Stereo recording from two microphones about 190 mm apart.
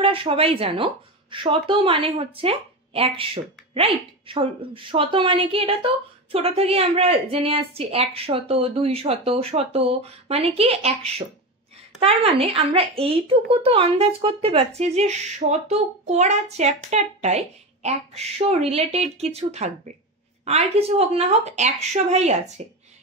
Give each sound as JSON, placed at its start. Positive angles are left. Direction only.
{"t": 0.0, "sound": "a woman's voice", "side_deg": -30}